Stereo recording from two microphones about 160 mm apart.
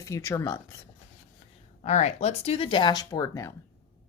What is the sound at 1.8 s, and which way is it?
Speech, 45° left (ahead or behind).